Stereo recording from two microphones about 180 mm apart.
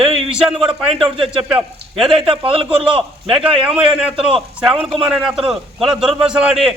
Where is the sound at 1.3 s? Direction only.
5° right (ahead or behind).